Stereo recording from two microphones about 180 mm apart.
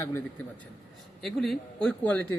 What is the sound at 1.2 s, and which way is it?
A man's voice, centre (ahead or behind).